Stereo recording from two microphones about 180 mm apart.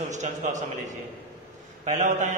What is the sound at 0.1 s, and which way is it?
Speech, 40° right (ahead or behind).